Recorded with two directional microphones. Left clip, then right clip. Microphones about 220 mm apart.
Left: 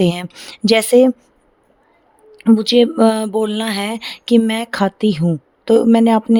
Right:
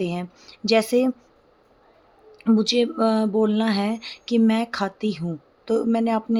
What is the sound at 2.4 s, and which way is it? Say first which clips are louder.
Speech: left 8 dB; 35° left (ahead or behind).